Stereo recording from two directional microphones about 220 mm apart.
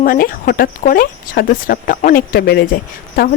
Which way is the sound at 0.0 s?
40° left (ahead or behind).